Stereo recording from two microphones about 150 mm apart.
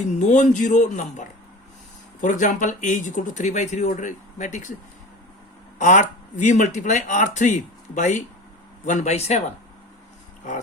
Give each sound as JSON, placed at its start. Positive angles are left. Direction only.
{"t": 0.0, "sound": "speech", "side_deg": 55}
{"t": 5.8, "sound": "speech", "side_deg": 55}